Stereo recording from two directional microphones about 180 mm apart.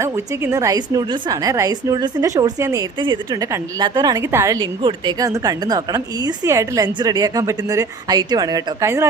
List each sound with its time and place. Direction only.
0.0 s a woman's voice: 15° right (ahead or behind)
4.6 s a woman's voice: 25° right (ahead or behind)